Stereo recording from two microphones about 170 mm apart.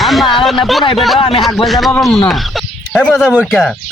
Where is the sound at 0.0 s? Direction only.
Centre (ahead or behind).